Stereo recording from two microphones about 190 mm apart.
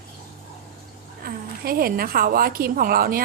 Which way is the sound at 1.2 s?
50° right (ahead or behind).